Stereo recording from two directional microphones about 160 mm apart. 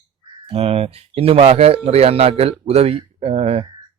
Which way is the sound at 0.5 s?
40° right (ahead or behind).